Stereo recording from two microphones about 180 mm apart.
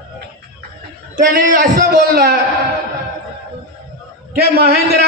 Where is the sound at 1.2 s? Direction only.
45° right (ahead or behind).